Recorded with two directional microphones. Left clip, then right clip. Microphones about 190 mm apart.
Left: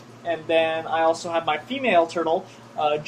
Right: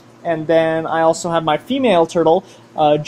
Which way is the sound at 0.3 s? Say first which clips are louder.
Right 6 dB; 35° right (ahead or behind).